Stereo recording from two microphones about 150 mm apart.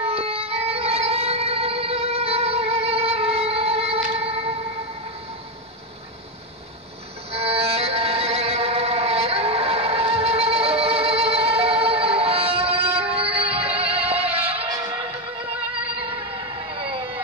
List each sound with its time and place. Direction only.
0.0 s music: 40° right (ahead or behind)
7.2 s music: 40° right (ahead or behind)
14.7 s music: 20° right (ahead or behind)